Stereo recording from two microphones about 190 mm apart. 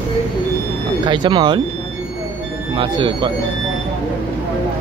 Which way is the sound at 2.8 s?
25° right (ahead or behind).